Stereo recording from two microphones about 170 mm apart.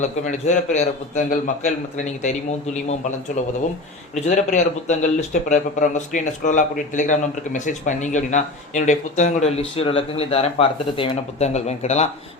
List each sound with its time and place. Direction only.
0.0 s a man's voice: 45° left (ahead or behind)
3.4 s a man's voice: 45° left (ahead or behind)